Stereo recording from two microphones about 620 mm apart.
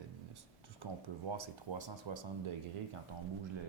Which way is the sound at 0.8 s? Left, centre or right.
Right.